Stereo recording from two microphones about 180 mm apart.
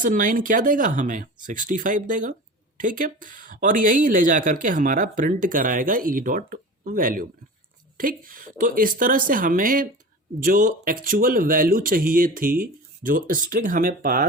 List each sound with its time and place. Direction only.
0.0 s speech: 45° right (ahead or behind)